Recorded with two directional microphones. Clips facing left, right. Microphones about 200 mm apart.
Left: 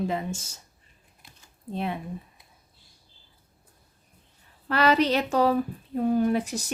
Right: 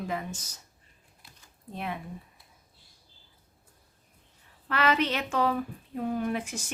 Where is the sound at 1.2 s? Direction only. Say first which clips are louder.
Left 2 dB; 20° left (ahead or behind).